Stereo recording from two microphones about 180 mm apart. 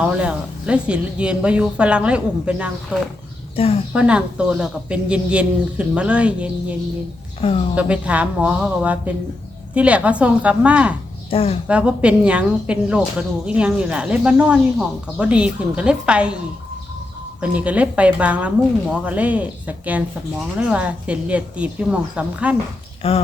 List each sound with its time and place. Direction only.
0.0 s speech: 5° right (ahead or behind)
3.5 s a woman's voice: 30° left (ahead or behind)
3.9 s speech: 5° right (ahead or behind)
7.4 s a woman's voice: 30° left (ahead or behind)
7.8 s speech: 5° right (ahead or behind)
11.3 s a woman's voice: 30° left (ahead or behind)
11.7 s a woman's voice: 5° right (ahead or behind)
17.4 s speech: 10° right (ahead or behind)
23.0 s a woman's voice: 30° left (ahead or behind)